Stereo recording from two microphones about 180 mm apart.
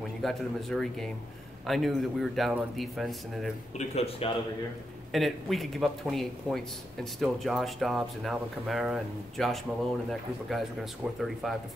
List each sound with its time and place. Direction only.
0.2 s speech: centre (ahead or behind)
3.7 s speech: 35° left (ahead or behind)
5.1 s speech: centre (ahead or behind)